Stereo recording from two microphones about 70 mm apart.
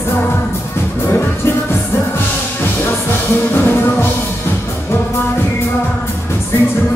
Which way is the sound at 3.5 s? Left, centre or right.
Left.